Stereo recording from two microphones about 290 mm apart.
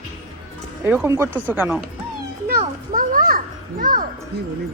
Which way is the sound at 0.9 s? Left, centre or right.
Centre.